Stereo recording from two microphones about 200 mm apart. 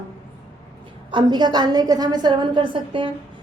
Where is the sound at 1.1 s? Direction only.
20° right (ahead or behind).